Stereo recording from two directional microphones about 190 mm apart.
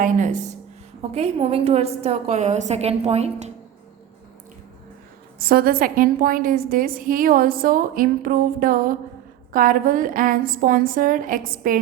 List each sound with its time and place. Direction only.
0.0 s a woman's voice: 40° right (ahead or behind)
5.4 s a woman's voice: 55° right (ahead or behind)